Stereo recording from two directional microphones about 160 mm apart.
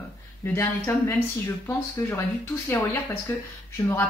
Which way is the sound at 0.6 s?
15° left (ahead or behind).